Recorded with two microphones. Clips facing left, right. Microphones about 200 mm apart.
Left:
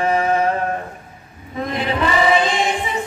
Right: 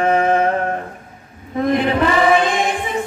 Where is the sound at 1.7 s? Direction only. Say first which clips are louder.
Right 2 dB; 55° right (ahead or behind).